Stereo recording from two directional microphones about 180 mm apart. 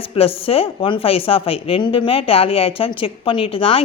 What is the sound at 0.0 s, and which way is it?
Speech, 30° left (ahead or behind).